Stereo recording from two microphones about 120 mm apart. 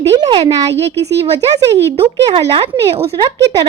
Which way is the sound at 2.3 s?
45° right (ahead or behind).